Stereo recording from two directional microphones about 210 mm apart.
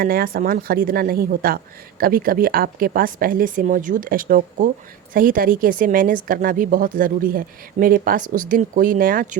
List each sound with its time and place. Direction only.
0.0 s a woman's voice: 45° right (ahead or behind)